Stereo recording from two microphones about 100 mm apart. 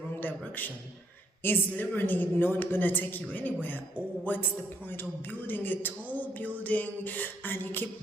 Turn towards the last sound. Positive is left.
turn(degrees=20)  # may be behind; listen again after turning